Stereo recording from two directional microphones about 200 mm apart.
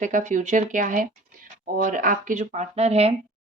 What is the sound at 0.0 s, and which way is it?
Speech, 40° right (ahead or behind).